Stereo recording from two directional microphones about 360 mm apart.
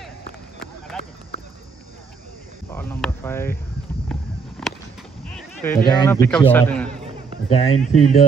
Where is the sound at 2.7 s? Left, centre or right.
Centre.